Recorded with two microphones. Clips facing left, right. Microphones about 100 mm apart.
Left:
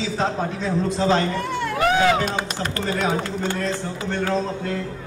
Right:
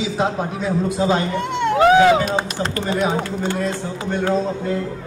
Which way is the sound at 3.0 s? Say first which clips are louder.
Right 2 dB; 10° right (ahead or behind).